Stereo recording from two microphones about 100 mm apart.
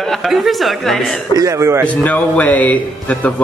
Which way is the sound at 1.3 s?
35° right (ahead or behind).